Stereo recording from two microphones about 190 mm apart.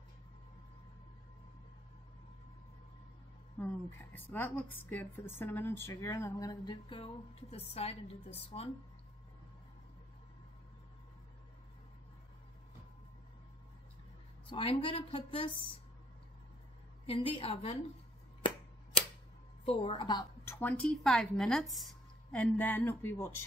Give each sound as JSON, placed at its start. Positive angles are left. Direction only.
{"t": 3.5, "sound": "a woman's voice", "side_deg": 10}
{"t": 14.5, "sound": "speech", "side_deg": 30}
{"t": 17.0, "sound": "speech", "side_deg": 25}
{"t": 19.6, "sound": "a woman's voice", "side_deg": 30}